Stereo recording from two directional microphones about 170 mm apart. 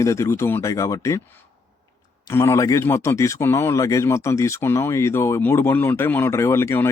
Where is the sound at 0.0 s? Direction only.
15° left (ahead or behind).